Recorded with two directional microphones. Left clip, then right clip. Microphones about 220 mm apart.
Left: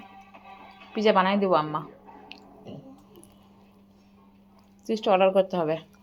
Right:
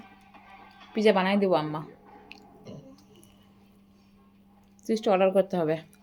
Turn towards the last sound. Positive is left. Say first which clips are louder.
# left 1 dB
turn(degrees=-20)  # may be behind; listen again after turning